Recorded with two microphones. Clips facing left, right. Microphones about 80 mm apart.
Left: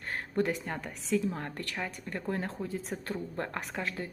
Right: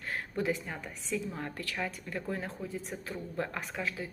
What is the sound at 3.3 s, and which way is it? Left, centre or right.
Speech, left.